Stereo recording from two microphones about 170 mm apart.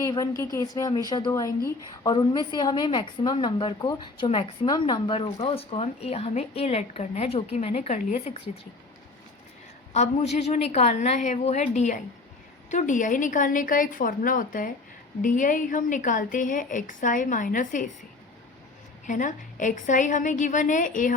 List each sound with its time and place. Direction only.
0.0 s a woman's voice: 20° left (ahead or behind); by 8.4 s 40° left (ahead or behind)
9.9 s a woman's voice: 40° left (ahead or behind)
19.0 s a woman's voice: 50° left (ahead or behind)